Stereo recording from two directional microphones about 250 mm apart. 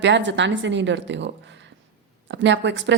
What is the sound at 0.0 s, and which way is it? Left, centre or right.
A woman's voice, right.